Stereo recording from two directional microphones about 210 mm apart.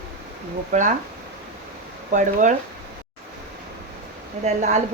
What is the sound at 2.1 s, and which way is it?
Speech, 35° right (ahead or behind).